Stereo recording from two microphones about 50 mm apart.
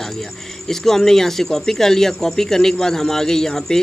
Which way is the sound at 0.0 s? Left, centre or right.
Centre.